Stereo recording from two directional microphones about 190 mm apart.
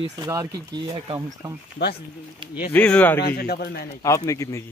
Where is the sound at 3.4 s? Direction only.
55° left (ahead or behind).